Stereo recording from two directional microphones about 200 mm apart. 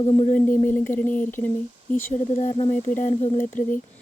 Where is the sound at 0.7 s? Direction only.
10° left (ahead or behind).